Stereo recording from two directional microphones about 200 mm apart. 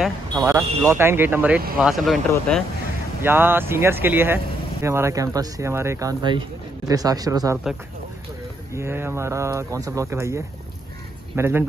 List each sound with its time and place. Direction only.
0.3 s speech: 15° right (ahead or behind); by 2.6 s 5° left (ahead or behind)
3.2 s speech: 10° right (ahead or behind)
8.7 s speech: 10° right (ahead or behind)